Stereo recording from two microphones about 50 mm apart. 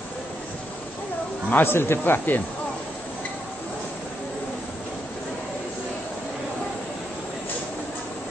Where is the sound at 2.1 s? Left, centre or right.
Left.